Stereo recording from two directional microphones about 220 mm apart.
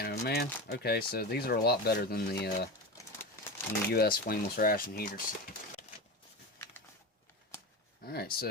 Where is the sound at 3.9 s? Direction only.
45° left (ahead or behind).